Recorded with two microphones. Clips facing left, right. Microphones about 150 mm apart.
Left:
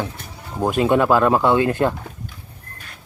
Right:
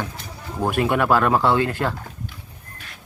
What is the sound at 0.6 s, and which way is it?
Speech, 20° left (ahead or behind).